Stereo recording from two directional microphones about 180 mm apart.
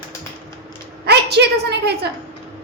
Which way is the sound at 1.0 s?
65° right (ahead or behind).